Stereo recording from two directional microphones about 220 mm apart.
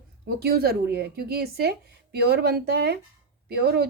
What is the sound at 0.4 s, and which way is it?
Speech, 45° right (ahead or behind).